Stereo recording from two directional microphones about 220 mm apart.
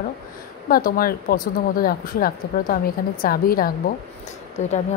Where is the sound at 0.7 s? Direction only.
40° left (ahead or behind).